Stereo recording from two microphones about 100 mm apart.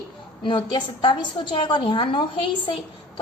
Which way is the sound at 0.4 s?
55° left (ahead or behind).